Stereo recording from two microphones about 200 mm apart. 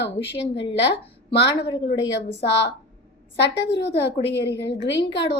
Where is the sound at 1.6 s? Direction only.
60° left (ahead or behind).